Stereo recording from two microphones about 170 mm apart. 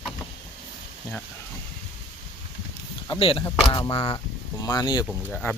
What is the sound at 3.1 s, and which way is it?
Speech, 35° left (ahead or behind).